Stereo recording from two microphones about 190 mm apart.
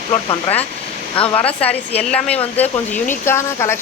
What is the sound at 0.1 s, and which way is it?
Speech, 25° left (ahead or behind).